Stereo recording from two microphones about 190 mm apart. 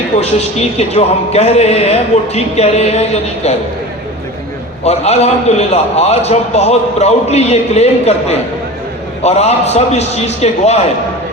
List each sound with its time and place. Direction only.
0.2 s a man's voice: 35° left (ahead or behind)
4.8 s a man's voice: 35° left (ahead or behind)